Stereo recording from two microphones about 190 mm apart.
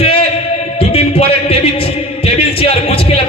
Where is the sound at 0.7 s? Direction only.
30° left (ahead or behind).